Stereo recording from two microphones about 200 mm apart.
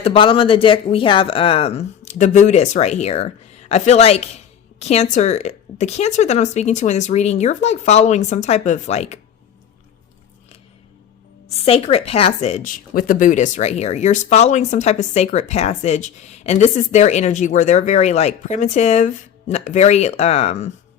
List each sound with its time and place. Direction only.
0.0 s a woman's voice: 25° left (ahead or behind)
11.6 s speech: 30° left (ahead or behind)